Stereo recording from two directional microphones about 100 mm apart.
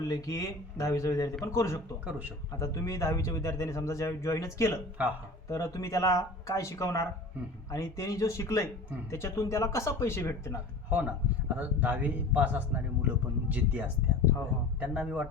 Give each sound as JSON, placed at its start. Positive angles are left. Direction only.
{"t": 0.1, "sound": "a man's voice", "side_deg": 35}
{"t": 5.0, "sound": "speech", "side_deg": -15}
{"t": 5.5, "sound": "a man's voice", "side_deg": 30}
{"t": 10.8, "sound": "speech", "side_deg": -15}